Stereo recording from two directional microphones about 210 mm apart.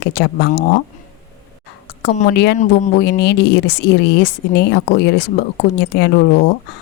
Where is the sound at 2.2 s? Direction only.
50° left (ahead or behind).